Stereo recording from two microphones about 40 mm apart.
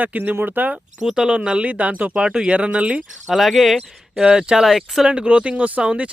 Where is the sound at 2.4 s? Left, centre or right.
Right.